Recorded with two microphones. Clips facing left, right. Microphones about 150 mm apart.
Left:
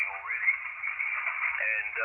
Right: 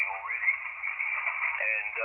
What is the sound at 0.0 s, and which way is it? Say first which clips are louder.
Radio: right 2 dB; 25° right (ahead or behind).